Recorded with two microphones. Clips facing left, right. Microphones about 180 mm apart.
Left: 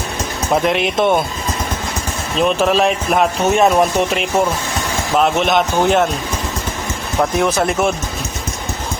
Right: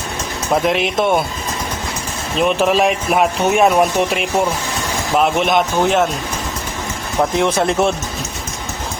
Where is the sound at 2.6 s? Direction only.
10° right (ahead or behind).